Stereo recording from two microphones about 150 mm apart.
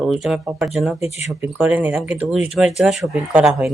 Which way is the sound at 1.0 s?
45° left (ahead or behind).